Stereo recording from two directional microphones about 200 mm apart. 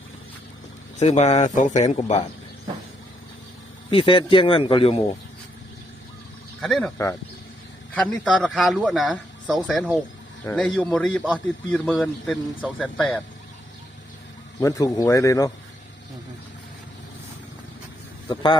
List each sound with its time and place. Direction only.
0.9 s speech: 35° left (ahead or behind)
3.8 s speech: 25° left (ahead or behind)
6.6 s speech: centre (ahead or behind)
7.9 s speech: 5° left (ahead or behind)
14.6 s speech: 15° left (ahead or behind)